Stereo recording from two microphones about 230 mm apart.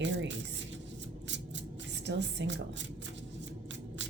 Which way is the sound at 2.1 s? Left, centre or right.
Right.